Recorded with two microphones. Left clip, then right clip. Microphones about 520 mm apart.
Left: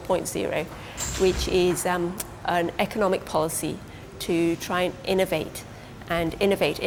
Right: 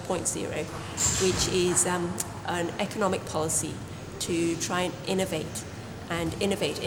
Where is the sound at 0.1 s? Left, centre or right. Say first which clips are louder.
Left 6 dB; left.